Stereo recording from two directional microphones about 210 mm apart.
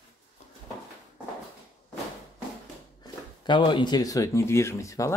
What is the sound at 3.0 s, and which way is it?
Speech, 20° left (ahead or behind).